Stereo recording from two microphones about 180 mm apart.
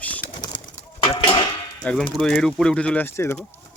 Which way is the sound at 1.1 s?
30° left (ahead or behind).